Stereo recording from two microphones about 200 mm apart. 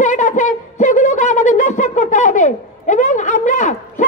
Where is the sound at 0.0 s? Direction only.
40° left (ahead or behind).